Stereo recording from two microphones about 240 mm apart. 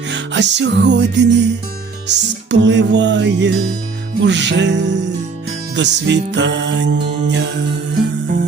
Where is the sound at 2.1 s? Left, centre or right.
Right.